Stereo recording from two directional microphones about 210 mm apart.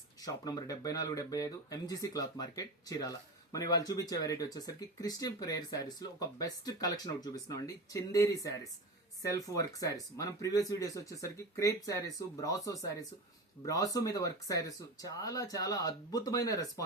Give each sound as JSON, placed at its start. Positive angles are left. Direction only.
{"t": 0.2, "sound": "speech", "side_deg": 15}